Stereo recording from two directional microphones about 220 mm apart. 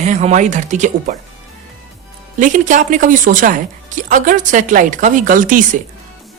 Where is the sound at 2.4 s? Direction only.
35° right (ahead or behind).